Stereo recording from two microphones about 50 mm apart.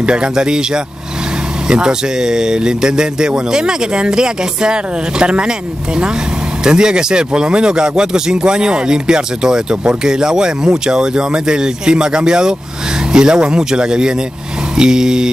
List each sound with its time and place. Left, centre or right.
0.0 s speech: centre
6.6 s speech: centre